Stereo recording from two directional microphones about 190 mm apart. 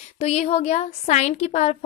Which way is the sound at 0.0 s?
35° left (ahead or behind).